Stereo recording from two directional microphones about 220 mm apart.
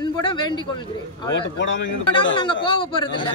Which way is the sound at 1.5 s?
55° left (ahead or behind).